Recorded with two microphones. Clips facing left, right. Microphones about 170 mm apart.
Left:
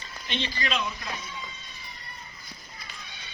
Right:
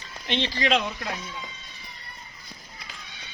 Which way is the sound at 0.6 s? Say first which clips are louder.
Right 6 dB; 90° right.